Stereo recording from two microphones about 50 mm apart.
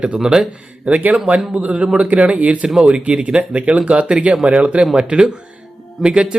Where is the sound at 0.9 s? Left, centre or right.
Right.